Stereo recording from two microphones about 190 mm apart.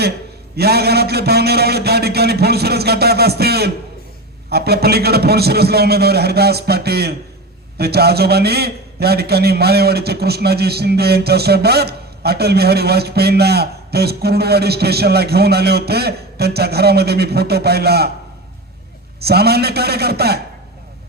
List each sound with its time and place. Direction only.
0.5 s a man's voice: 55° right (ahead or behind)
19.2 s a man's voice: 55° right (ahead or behind)